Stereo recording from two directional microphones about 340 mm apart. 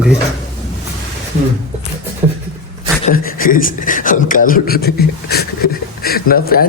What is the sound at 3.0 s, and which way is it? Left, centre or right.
Speech, left.